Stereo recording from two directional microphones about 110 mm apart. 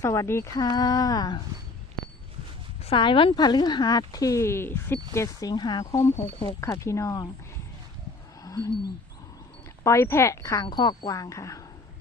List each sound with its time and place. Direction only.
0.0 s speech: 30° left (ahead or behind)
2.8 s speech: 50° left (ahead or behind); by 7.3 s 30° left (ahead or behind)
8.4 s a sound: 35° left (ahead or behind)
9.8 s speech: 25° left (ahead or behind)
10.7 s speech: 40° left (ahead or behind)